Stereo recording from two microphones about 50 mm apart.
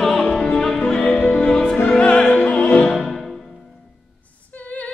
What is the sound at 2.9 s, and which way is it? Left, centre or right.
Music, centre.